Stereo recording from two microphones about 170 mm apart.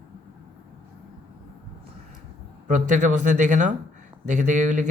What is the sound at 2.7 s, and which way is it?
Speech, 50° right (ahead or behind).